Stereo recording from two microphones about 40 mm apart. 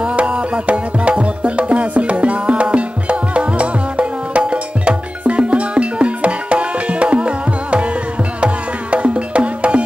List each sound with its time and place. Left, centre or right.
0.0 s music: right
8.9 s music: right